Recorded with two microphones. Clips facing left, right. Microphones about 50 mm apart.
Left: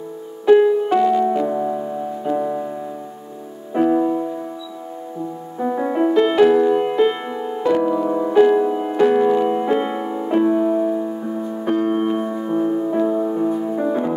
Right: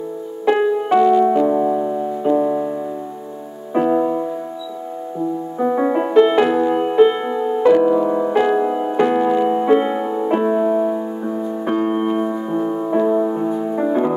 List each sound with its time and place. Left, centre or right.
0.5 s music: right
1.3 s piano: centre
3.7 s music: centre
5.6 s music: right
7.1 s music: centre
10.2 s music: right
13.1 s music: right
13.4 s music: centre